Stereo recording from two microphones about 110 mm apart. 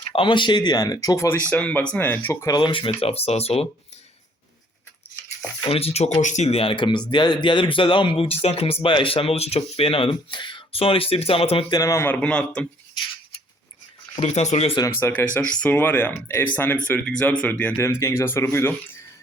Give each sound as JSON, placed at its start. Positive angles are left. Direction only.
{"t": 0.1, "sound": "speech", "side_deg": 50}
{"t": 1.5, "sound": "speech", "side_deg": 15}
{"t": 2.3, "sound": "speech", "side_deg": 25}
{"t": 2.6, "sound": "speech", "side_deg": 50}
{"t": 5.6, "sound": "speech", "side_deg": 65}
{"t": 6.2, "sound": "speech", "side_deg": 90}
{"t": 11.7, "sound": "speech", "side_deg": 30}
{"t": 12.0, "sound": "speech", "side_deg": 10}
{"t": 14.2, "sound": "speech", "side_deg": 85}
{"t": 14.8, "sound": "speech", "side_deg": 20}
{"t": 17.7, "sound": "speech", "side_deg": 25}